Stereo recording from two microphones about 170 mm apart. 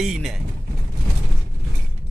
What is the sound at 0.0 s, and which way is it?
Speech, centre (ahead or behind).